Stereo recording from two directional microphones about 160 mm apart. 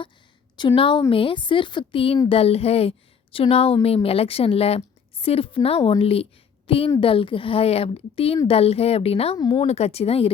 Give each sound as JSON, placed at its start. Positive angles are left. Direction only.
{"t": 0.8, "sound": "a woman's voice", "side_deg": 30}